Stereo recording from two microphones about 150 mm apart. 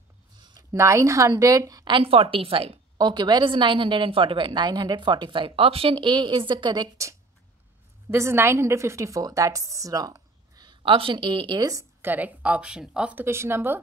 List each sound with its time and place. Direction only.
0.4 s a woman's voice: 25° right (ahead or behind)
12.0 s speech: 10° right (ahead or behind)